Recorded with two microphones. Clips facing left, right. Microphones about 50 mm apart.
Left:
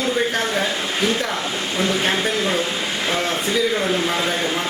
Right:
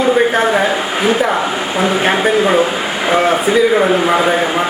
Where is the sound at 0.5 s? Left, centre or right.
Right.